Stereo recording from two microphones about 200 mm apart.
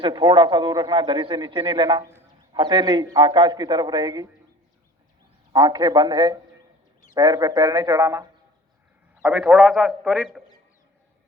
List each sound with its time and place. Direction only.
0.0 s a man's voice: 20° right (ahead or behind)
5.5 s a man's voice: 20° right (ahead or behind)
9.2 s a man's voice: 5° right (ahead or behind)